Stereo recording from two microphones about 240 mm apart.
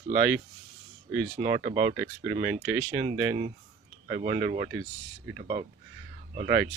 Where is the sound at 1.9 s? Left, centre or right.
Right.